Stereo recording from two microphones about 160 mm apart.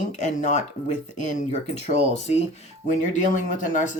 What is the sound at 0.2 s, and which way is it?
Speech, 50° left (ahead or behind).